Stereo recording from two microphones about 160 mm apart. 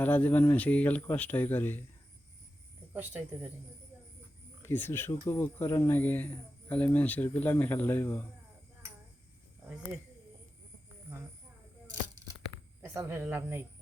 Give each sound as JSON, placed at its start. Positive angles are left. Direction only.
{"t": 0.0, "sound": "speech", "side_deg": 10}
{"t": 2.9, "sound": "speech", "side_deg": -10}
{"t": 4.6, "sound": "speech", "side_deg": 15}
{"t": 12.8, "sound": "speech", "side_deg": -15}